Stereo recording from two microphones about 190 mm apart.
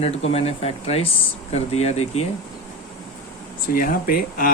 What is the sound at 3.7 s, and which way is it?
Speech, 45° left (ahead or behind).